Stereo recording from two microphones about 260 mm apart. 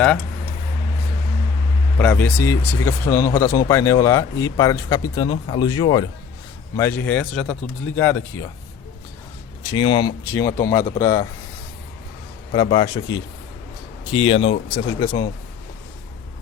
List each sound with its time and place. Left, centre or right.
2.0 s speech: centre
9.6 s speech: centre
12.5 s speech: centre